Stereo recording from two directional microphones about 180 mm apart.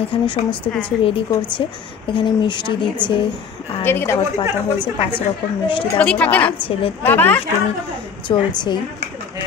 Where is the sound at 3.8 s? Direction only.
10° left (ahead or behind).